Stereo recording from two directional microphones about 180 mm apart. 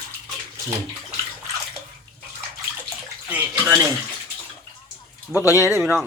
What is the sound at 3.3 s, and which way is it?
Bathtub, 15° right (ahead or behind).